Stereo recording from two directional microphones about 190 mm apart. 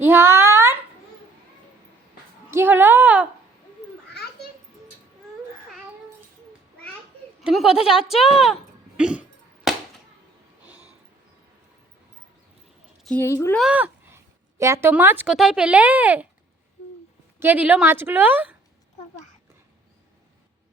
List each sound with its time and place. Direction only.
0.0 s a sound: 10° right (ahead or behind)
2.5 s speech: 10° right (ahead or behind)
4.1 s children playing: 60° left (ahead or behind)
7.4 s speech: centre (ahead or behind)
9.0 s dog: 5° right (ahead or behind)
9.7 s a sound: centre (ahead or behind)
13.1 s speech: 10° left (ahead or behind)
13.6 s speech: 5° right (ahead or behind)
17.4 s speech: 10° right (ahead or behind)